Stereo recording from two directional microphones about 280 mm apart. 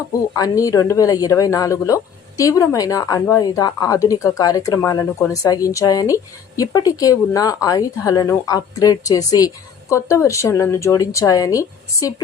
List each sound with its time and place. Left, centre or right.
0.3 s speech: centre